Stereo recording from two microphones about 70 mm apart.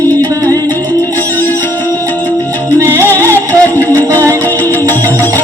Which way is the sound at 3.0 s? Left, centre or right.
Left.